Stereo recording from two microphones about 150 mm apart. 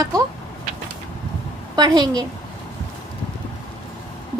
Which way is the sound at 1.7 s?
25° right (ahead or behind).